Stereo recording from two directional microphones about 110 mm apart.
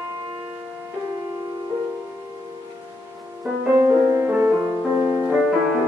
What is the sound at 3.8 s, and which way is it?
Music, 20° right (ahead or behind).